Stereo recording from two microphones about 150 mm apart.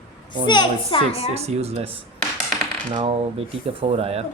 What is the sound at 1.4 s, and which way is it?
Speech, 45° right (ahead or behind).